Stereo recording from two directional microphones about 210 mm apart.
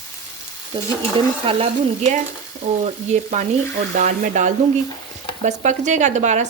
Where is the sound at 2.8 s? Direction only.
35° right (ahead or behind).